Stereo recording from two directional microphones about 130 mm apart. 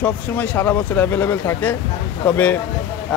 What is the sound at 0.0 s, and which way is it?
A man's voice, 10° left (ahead or behind).